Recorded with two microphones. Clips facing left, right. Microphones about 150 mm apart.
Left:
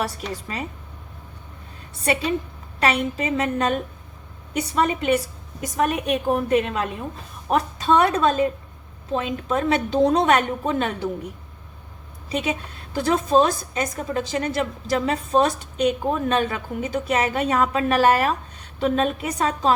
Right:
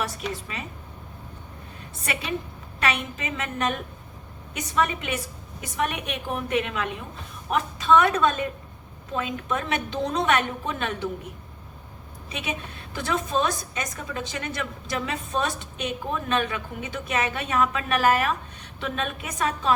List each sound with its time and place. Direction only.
2.8 s a woman's voice: 35° left (ahead or behind)
12.3 s a woman's voice: 35° left (ahead or behind)